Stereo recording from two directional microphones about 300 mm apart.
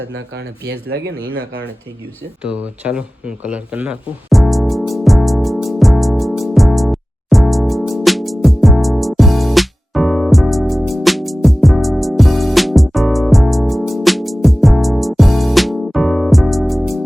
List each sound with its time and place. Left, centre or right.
0.1 s speech: right
1.1 s speech: centre
2.4 s a sound: centre